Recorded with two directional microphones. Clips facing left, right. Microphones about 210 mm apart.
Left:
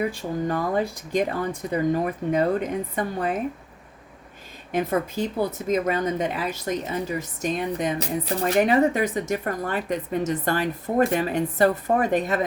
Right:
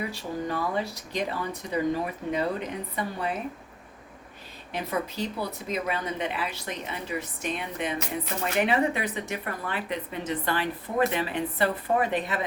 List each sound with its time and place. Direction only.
0.1 s speech: 50° left (ahead or behind)
4.7 s speech: 50° left (ahead or behind)